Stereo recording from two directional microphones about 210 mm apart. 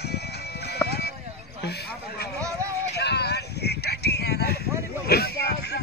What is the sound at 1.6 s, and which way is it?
Speech, 50° left (ahead or behind).